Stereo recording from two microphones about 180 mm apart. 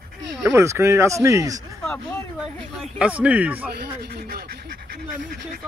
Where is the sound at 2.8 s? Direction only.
5° right (ahead or behind).